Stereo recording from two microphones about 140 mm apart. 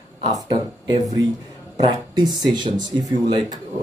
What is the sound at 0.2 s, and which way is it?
Speech, 30° right (ahead or behind).